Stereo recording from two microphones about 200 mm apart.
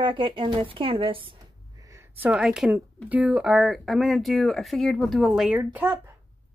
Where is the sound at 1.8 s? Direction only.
10° right (ahead or behind).